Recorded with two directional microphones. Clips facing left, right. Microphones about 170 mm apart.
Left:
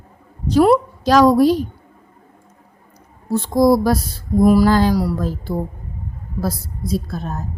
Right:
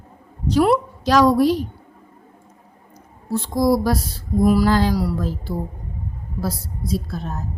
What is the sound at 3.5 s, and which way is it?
A woman's voice, 50° left (ahead or behind).